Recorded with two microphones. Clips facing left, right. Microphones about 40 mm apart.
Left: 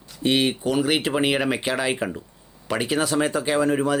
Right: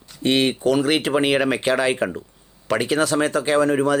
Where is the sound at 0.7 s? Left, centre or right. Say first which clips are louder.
Right 4 dB; centre.